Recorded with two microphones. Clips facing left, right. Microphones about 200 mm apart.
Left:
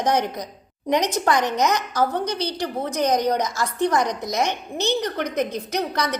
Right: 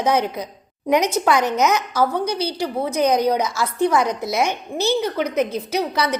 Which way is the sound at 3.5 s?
15° left (ahead or behind).